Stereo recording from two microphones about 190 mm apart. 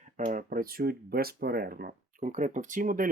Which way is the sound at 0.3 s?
45° right (ahead or behind).